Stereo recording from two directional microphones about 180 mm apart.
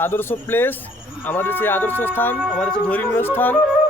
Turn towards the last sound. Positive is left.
turn(degrees=10)  # may be behind; listen again after turning